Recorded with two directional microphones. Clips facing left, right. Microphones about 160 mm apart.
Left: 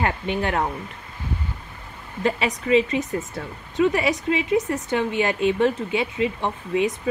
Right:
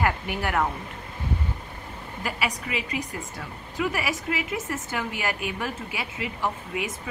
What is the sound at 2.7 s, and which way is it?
Speech, 25° left (ahead or behind).